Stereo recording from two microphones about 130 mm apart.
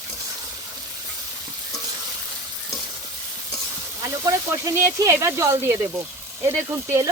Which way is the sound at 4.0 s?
25° right (ahead or behind).